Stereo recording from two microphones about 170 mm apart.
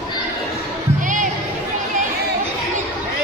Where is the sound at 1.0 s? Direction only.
50° right (ahead or behind).